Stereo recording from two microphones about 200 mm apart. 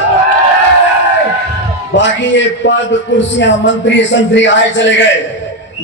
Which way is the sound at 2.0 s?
65° left (ahead or behind).